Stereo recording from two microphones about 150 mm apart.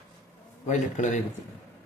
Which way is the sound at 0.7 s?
55° left (ahead or behind).